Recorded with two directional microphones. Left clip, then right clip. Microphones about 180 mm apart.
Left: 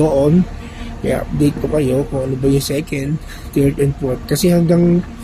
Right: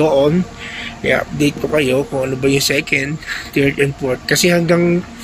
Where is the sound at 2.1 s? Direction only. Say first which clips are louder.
Right 2 dB; 30° right (ahead or behind).